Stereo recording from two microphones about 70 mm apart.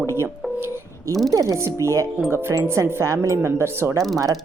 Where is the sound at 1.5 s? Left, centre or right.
Right.